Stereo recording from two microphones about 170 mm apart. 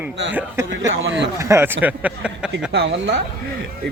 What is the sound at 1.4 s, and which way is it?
A man's voice, 15° right (ahead or behind).